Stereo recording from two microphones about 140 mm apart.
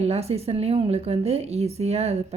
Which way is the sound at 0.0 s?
50° right (ahead or behind).